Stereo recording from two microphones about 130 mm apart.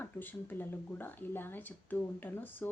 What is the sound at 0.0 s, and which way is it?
Speech, 15° left (ahead or behind).